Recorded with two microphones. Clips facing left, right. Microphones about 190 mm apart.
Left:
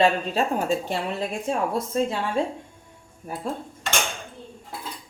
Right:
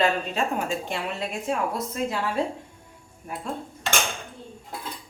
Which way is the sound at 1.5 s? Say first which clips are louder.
Left 1 dB; 30° left (ahead or behind).